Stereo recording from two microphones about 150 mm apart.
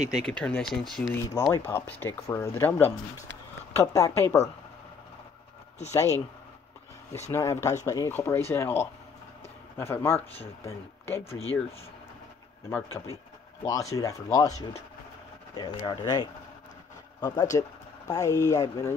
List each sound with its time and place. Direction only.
0.1 s speech: 5° left (ahead or behind)
1.0 s speech: 20° left (ahead or behind)
7.2 s speech: 20° left (ahead or behind)
11.2 s speech: 40° left (ahead or behind)
12.6 s speech: 15° left (ahead or behind)
15.5 s speech: 30° left (ahead or behind)